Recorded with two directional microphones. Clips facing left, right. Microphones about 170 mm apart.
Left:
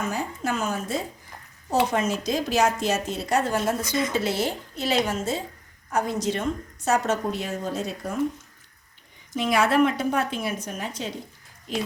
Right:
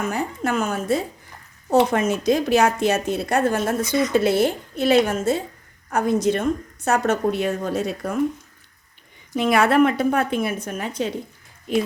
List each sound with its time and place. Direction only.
0.1 s a woman's voice: 60° right (ahead or behind)
9.3 s a woman's voice: 60° right (ahead or behind)